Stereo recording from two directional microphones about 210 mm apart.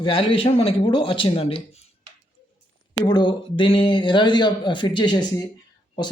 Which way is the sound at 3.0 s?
20° left (ahead or behind).